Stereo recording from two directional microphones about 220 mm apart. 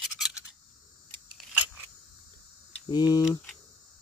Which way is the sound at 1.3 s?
5° right (ahead or behind).